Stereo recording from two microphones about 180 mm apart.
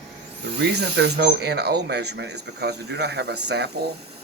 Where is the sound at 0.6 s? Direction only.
65° right (ahead or behind).